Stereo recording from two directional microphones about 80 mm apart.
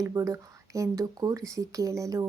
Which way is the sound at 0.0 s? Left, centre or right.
Right.